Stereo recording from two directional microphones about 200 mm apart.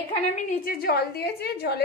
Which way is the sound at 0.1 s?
35° left (ahead or behind).